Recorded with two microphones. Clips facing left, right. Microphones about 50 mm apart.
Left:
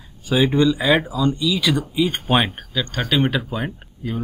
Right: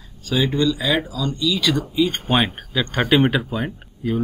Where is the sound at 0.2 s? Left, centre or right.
Centre.